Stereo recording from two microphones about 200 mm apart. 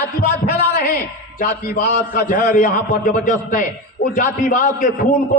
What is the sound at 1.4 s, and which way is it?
A man's voice, 45° left (ahead or behind).